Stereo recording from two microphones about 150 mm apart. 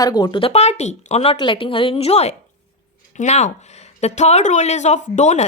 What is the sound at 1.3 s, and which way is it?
Speech, 35° left (ahead or behind).